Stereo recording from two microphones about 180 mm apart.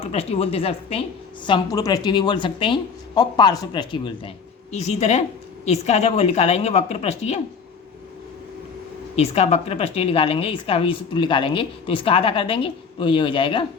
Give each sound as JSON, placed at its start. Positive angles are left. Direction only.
{"t": 0.1, "sound": "speech", "side_deg": 35}
{"t": 1.5, "sound": "speech", "side_deg": 20}
{"t": 4.7, "sound": "speech", "side_deg": 40}
{"t": 9.1, "sound": "speech", "side_deg": 35}